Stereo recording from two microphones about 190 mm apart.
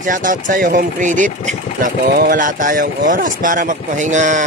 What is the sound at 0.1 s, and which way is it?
Speech, 45° right (ahead or behind).